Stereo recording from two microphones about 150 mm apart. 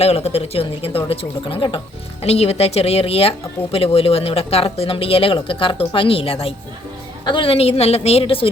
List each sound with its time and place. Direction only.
0.0 s speech: 45° left (ahead or behind)